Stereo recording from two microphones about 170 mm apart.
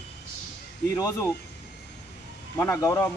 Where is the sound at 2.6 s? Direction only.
20° left (ahead or behind).